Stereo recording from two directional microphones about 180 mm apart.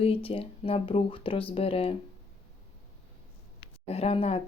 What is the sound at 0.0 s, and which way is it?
Speech, 30° left (ahead or behind).